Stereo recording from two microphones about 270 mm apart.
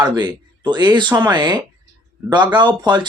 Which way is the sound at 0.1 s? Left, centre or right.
Centre.